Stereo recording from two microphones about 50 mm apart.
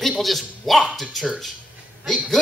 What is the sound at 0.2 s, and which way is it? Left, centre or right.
Speech, centre.